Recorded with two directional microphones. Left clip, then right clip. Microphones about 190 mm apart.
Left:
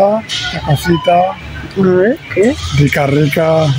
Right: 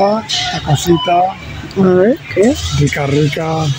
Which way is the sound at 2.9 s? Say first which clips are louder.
Left 4 dB; 50° left (ahead or behind).